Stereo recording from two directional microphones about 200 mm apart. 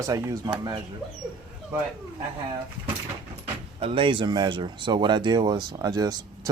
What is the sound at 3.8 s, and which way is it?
Speech, 25° right (ahead or behind).